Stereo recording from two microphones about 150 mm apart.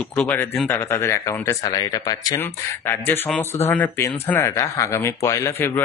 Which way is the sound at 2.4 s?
15° left (ahead or behind).